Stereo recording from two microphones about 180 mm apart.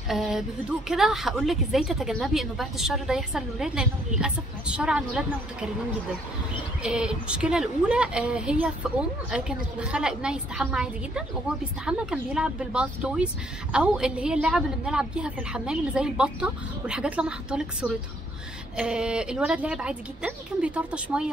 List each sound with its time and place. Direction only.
0.1 s speech: centre (ahead or behind)
6.8 s speech: 5° right (ahead or behind)